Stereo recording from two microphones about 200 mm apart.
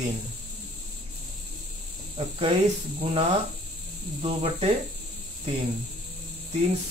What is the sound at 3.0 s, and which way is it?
Speech, 30° right (ahead or behind).